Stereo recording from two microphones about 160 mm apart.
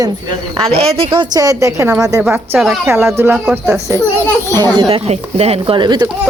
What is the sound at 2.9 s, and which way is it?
Speech, 15° right (ahead or behind).